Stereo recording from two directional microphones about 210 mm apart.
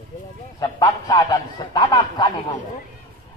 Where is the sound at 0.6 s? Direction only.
15° left (ahead or behind).